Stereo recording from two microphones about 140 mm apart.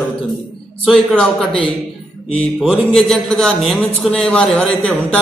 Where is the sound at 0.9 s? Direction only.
5° left (ahead or behind).